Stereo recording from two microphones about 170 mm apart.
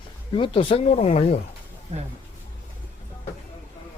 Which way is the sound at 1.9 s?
40° right (ahead or behind).